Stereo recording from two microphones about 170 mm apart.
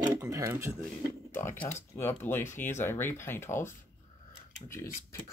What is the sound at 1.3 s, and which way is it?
Speech, 15° left (ahead or behind).